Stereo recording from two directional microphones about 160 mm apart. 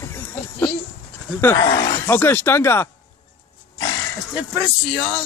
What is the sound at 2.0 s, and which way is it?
Speech, 15° left (ahead or behind).